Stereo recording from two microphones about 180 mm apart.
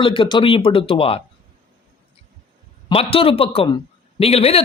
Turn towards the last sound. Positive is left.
turn(degrees=35)  # may be behind; listen again after turning